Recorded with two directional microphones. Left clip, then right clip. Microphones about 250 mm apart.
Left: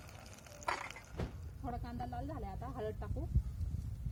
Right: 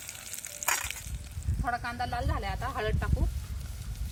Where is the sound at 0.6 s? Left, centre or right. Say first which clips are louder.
Right 8 dB; centre.